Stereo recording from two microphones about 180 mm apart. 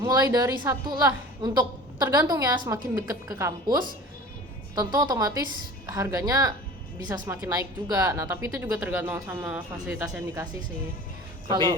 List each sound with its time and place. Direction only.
0.0 s a woman's voice: 20° right (ahead or behind)
11.4 s a woman's voice: 25° right (ahead or behind)